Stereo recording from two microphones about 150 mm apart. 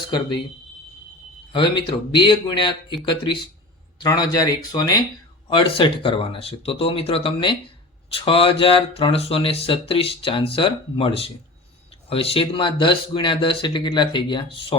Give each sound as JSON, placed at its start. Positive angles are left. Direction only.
{"t": 1.5, "sound": "speech", "side_deg": 30}
{"t": 5.5, "sound": "speech", "side_deg": 35}